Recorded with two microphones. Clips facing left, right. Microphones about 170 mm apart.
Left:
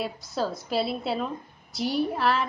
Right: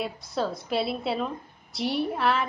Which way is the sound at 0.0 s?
Centre (ahead or behind).